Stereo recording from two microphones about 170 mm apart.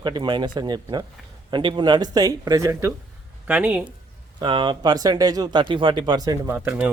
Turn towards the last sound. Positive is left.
turn(degrees=-5)  # may be behind; listen again after turning